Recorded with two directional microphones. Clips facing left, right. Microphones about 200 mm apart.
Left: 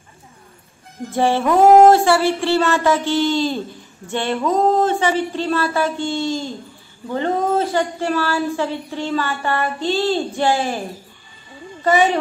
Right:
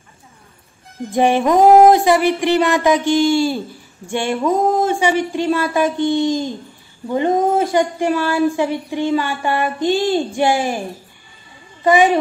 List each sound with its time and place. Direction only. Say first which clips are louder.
1.1 s speech: right 2 dB; 15° right (ahead or behind)
11.8 s a woman's voice: right 3 dB; 15° right (ahead or behind)